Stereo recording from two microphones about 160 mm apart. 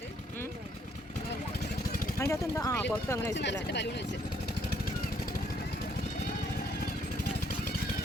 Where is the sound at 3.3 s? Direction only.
90° left.